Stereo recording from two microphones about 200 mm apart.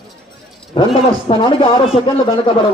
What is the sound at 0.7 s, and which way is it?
A man's voice, 30° left (ahead or behind).